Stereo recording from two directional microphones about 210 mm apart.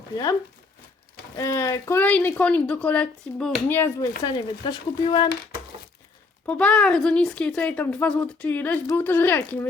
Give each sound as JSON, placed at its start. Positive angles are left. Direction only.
{"t": 1.4, "sound": "speech", "side_deg": 15}
{"t": 4.3, "sound": "speech", "side_deg": 25}
{"t": 6.4, "sound": "speech", "side_deg": 5}